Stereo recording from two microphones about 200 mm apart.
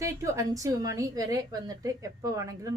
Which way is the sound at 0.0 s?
15° right (ahead or behind).